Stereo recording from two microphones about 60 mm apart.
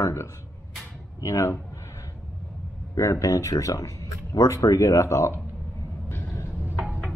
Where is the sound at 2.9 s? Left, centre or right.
Left.